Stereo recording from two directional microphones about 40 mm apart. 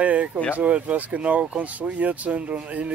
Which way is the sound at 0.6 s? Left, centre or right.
Right.